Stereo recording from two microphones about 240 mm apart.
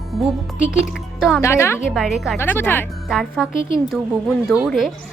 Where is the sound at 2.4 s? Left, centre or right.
Centre.